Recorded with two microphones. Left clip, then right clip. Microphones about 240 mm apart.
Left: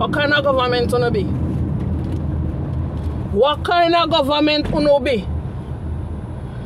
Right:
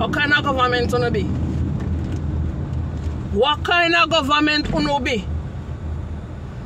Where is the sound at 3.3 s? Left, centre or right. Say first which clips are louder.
Left 2 dB; centre.